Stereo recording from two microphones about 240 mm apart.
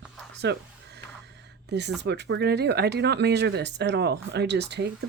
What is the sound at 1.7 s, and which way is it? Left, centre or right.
Speech, right.